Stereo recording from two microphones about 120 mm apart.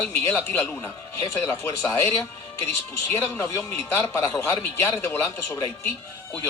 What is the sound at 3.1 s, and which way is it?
Speech, 20° left (ahead or behind).